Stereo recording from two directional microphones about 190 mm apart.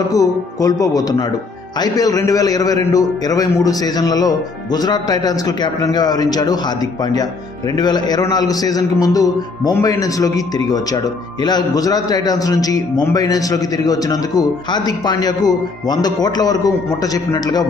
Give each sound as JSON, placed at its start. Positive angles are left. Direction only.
{"t": 0.1, "sound": "a man's voice", "side_deg": 20}
{"t": 7.7, "sound": "a man's voice", "side_deg": 20}